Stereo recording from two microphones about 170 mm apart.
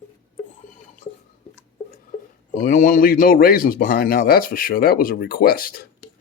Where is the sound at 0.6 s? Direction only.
50° left (ahead or behind).